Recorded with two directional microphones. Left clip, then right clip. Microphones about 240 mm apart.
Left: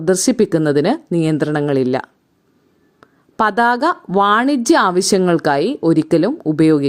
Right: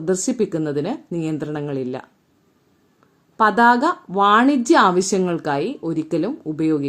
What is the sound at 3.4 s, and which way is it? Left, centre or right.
Speech, left.